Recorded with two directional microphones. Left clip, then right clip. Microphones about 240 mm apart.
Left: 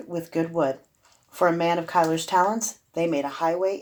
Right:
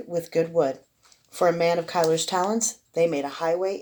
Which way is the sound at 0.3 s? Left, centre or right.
Right.